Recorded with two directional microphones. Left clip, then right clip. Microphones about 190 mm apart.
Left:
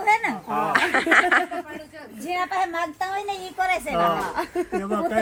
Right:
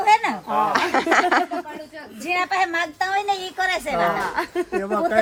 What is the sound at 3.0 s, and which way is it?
Speech, 30° right (ahead or behind).